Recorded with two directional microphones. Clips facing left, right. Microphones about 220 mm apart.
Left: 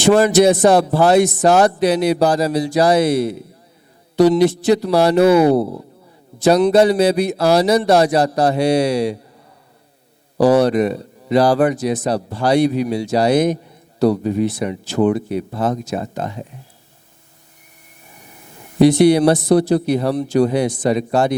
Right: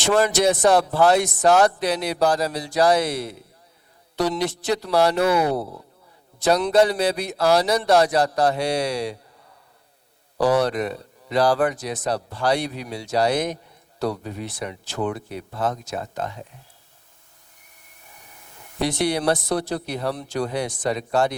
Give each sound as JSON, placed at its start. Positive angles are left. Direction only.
{"t": 0.0, "sound": "speech", "side_deg": 5}
{"t": 5.2, "sound": "speech", "side_deg": 30}
{"t": 6.4, "sound": "speech", "side_deg": 10}
{"t": 10.3, "sound": "a man's voice", "side_deg": 30}
{"t": 10.6, "sound": "speech", "side_deg": 10}
{"t": 18.1, "sound": "speech", "side_deg": 15}